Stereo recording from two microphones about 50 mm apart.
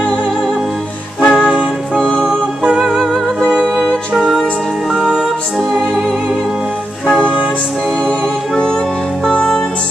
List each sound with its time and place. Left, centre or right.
1.2 s music: centre
2.0 s music: centre
2.2 s music: centre
9.2 s music: centre